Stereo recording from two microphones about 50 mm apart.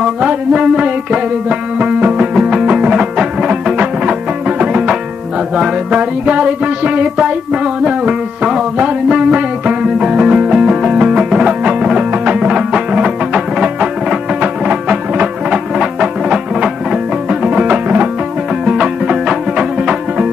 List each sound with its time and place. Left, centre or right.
0.2 s music: right
3.7 s music: right
17.6 s music: right
18.7 s music: centre